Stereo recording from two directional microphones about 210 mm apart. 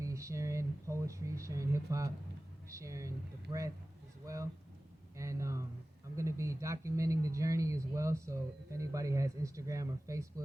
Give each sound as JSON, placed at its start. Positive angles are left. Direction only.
{"t": 0.0, "sound": "speech", "side_deg": -15}
{"t": 5.1, "sound": "speech", "side_deg": -15}